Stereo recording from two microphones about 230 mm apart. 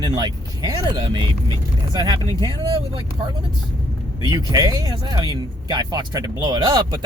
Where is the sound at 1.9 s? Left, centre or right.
Centre.